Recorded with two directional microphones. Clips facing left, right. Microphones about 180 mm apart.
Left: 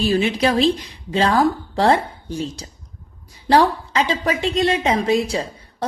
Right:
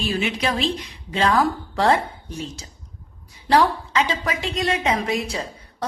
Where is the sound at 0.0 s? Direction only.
35° left (ahead or behind).